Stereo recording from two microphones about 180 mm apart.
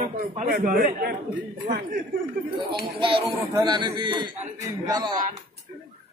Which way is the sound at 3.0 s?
30° right (ahead or behind).